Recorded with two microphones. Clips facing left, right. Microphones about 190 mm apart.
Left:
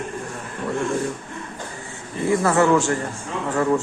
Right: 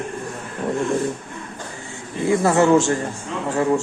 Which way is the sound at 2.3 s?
20° right (ahead or behind).